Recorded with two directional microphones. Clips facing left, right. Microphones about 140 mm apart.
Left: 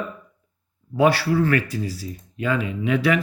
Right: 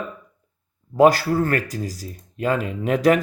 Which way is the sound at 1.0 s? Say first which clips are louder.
Right 3 dB; 40° right (ahead or behind).